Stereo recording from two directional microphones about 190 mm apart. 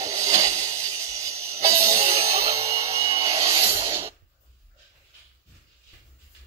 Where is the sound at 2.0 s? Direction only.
15° right (ahead or behind).